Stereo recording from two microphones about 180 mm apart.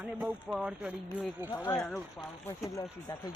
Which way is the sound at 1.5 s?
15° left (ahead or behind).